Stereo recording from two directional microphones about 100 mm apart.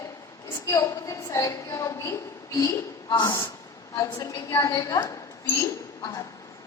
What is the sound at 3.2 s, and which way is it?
A woman's voice, 45° left (ahead or behind).